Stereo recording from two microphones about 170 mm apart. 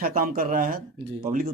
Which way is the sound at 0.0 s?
60° right (ahead or behind).